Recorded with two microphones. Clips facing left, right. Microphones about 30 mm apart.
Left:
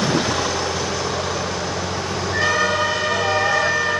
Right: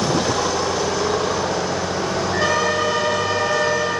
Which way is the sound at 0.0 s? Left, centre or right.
Centre.